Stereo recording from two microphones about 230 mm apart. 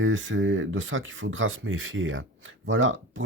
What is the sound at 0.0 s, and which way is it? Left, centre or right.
Speech, right.